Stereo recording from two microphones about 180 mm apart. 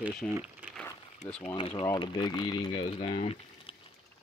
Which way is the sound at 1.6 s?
25° left (ahead or behind).